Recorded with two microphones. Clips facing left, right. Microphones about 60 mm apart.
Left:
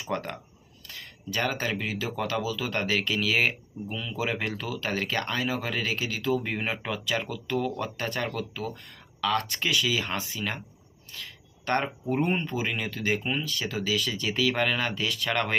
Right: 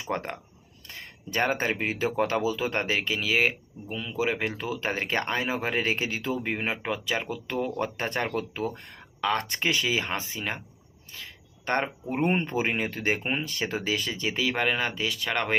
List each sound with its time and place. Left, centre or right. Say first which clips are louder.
0.0 s speech: right 1 dB; right